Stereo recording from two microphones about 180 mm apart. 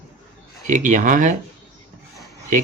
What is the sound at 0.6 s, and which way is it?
Speech, 45° right (ahead or behind).